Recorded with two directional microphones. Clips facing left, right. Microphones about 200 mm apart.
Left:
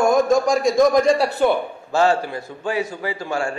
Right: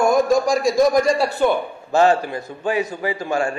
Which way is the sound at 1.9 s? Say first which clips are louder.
Right 2 dB; 20° right (ahead or behind).